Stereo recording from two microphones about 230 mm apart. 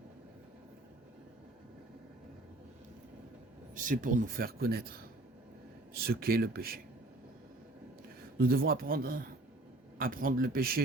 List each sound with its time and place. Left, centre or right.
3.8 s speech: right
8.4 s speech: right